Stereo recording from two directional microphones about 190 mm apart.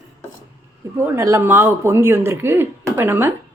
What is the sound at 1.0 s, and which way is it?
Speech, 10° right (ahead or behind).